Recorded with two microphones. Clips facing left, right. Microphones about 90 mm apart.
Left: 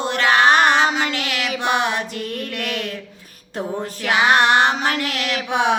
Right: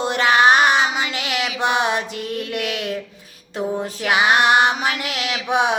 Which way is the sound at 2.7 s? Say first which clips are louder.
Right 1 dB; 20° right (ahead or behind).